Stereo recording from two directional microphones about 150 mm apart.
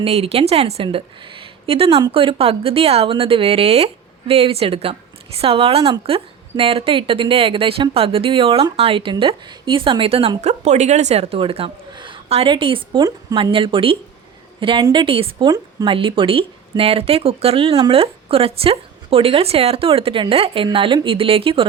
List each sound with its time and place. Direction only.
0.0 s a woman's voice: 40° right (ahead or behind)